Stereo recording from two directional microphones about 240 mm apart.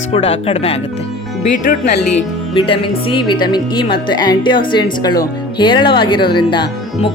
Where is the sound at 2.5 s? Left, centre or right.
Left.